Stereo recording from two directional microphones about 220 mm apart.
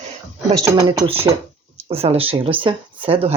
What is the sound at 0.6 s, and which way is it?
Speech, 15° right (ahead or behind).